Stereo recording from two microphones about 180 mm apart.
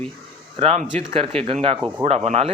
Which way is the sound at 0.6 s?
35° right (ahead or behind).